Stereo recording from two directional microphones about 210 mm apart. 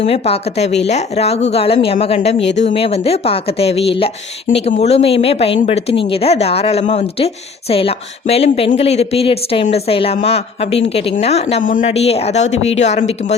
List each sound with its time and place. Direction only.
0.0 s speech: 30° left (ahead or behind)
2.4 s speech: 55° left (ahead or behind)
2.6 s speech: 25° left (ahead or behind)